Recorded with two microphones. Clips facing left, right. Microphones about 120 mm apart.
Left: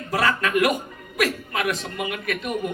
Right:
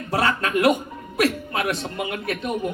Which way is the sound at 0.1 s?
30° right (ahead or behind).